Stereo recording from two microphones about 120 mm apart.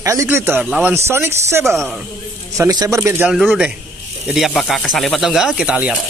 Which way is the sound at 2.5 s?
30° right (ahead or behind).